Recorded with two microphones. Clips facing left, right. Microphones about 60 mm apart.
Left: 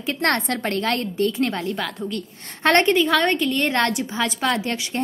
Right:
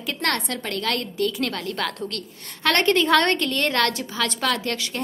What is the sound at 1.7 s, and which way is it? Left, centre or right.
Speech, centre.